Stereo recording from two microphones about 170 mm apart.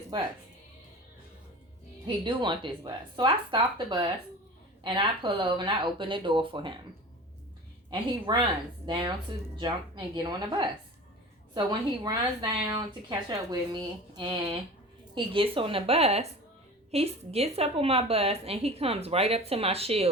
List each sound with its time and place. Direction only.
0.1 s speech: 25° right (ahead or behind)
2.0 s speech: 30° right (ahead or behind)
7.9 s speech: 30° right (ahead or behind)
12.0 s a woman's voice: 25° right (ahead or behind)